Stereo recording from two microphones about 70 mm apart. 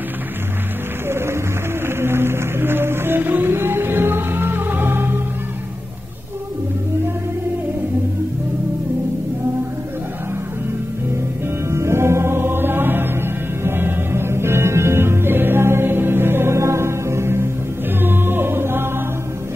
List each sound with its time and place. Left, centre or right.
1.0 s music: right
11.7 s music: right